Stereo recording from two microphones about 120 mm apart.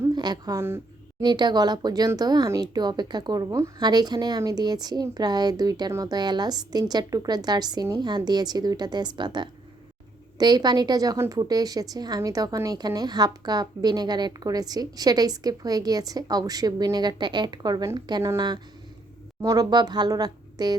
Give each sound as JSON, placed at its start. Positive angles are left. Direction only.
{"t": 0.1, "sound": "a woman's voice", "side_deg": -35}
{"t": 18.2, "sound": "a woman's voice", "side_deg": -25}